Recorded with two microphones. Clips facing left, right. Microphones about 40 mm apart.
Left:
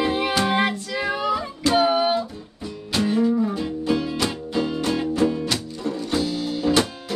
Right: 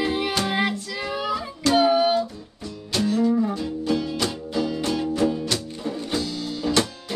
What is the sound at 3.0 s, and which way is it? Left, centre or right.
Music, centre.